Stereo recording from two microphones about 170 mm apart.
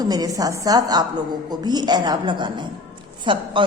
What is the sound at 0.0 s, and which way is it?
A woman's voice, 20° right (ahead or behind).